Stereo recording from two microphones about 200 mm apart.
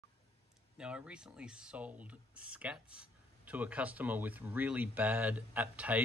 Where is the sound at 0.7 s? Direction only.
5° right (ahead or behind).